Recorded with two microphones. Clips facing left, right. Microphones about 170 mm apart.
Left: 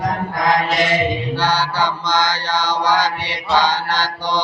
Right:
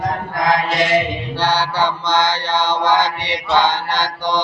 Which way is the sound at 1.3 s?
30° right (ahead or behind).